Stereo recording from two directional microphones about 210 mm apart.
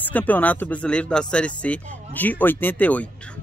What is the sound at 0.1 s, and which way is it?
Speech, 10° left (ahead or behind).